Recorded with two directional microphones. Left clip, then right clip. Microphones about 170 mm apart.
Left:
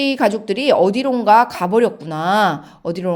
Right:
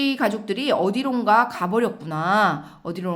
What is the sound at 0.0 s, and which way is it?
Speech, 30° left (ahead or behind).